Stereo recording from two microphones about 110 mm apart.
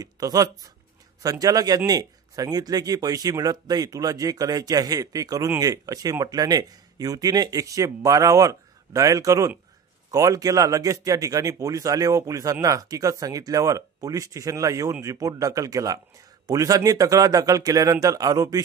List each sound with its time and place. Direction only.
0.0 s speech: 35° right (ahead or behind)